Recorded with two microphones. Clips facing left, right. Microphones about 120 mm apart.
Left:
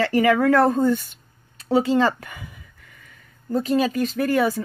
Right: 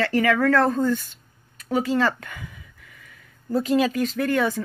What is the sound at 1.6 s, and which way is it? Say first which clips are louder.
Speech: left 3 dB; 25° left (ahead or behind).